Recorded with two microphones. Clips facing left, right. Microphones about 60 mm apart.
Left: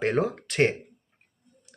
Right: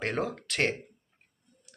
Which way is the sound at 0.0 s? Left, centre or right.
Centre.